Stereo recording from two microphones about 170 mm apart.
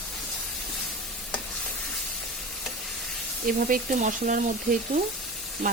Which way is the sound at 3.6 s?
55° right (ahead or behind).